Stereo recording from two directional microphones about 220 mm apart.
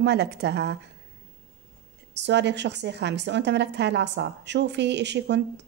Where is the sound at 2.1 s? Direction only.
50° right (ahead or behind).